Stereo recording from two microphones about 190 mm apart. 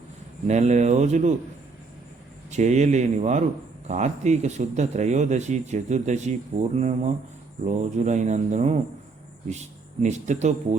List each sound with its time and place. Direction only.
0.4 s speech: 35° right (ahead or behind)
2.5 s speech: 35° right (ahead or behind)
10.0 s speech: 40° right (ahead or behind)